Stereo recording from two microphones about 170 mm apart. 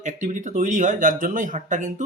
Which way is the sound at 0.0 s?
45° right (ahead or behind).